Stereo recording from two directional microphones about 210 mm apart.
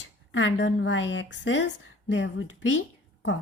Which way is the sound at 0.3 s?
65° left (ahead or behind).